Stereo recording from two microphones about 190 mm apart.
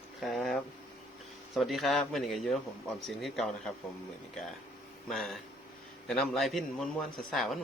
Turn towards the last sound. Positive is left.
turn(degrees=0)  # may be behind; listen again after turning